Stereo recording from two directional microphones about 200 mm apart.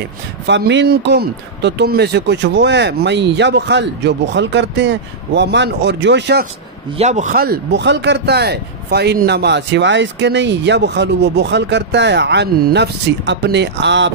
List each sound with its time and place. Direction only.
0.5 s speech: 60° right (ahead or behind)
7.0 s speech: 35° right (ahead or behind); by 14.1 s 60° right (ahead or behind)